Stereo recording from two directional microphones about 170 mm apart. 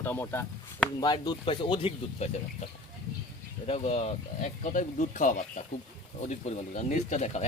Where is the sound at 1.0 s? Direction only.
25° left (ahead or behind).